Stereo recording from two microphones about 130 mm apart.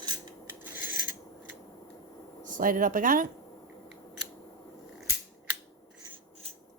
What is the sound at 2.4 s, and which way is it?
Speech, 90° right.